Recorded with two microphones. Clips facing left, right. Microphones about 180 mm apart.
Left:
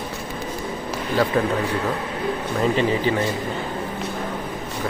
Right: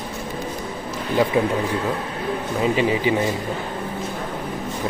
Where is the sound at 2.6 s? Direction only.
10° right (ahead or behind).